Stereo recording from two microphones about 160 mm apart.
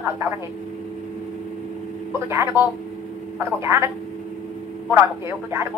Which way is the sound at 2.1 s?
15° right (ahead or behind).